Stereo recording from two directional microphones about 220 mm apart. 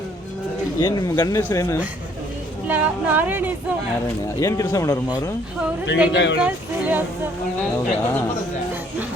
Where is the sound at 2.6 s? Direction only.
5° right (ahead or behind).